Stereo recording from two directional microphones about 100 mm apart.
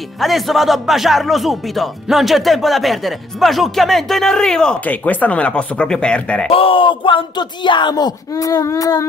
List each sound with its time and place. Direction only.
0.2 s speech: centre (ahead or behind)
6.5 s a sound: 65° left (ahead or behind)
7.9 s speech: 35° left (ahead or behind)